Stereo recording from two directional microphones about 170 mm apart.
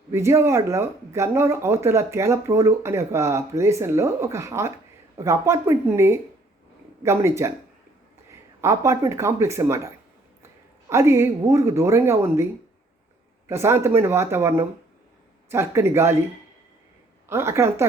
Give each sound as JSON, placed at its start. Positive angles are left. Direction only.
{"t": 0.1, "sound": "speech", "side_deg": -15}
{"t": 13.5, "sound": "speech", "side_deg": -15}
{"t": 17.2, "sound": "speech", "side_deg": -15}